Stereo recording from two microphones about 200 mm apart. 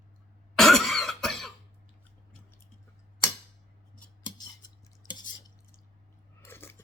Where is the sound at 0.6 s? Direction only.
Centre (ahead or behind).